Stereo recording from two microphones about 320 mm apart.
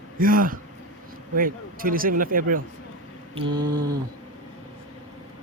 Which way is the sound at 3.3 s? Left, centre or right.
Centre.